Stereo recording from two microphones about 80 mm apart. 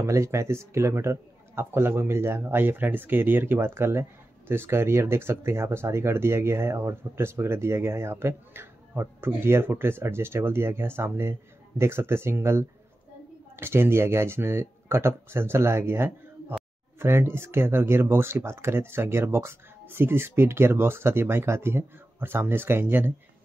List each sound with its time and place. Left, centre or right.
0.0 s speech: right